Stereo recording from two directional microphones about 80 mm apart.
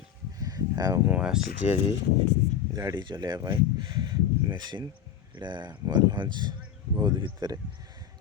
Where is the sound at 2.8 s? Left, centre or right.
Right.